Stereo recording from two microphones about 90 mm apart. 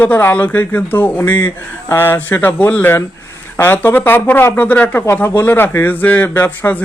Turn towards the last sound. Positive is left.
turn(degrees=25)  # may be behind; listen again after turning